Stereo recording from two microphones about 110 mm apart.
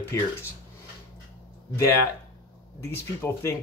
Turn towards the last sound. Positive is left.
turn(degrees=20)  # may be behind; listen again after turning